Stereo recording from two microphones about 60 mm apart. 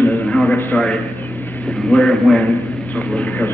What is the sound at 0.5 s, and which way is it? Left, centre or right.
Speech, left.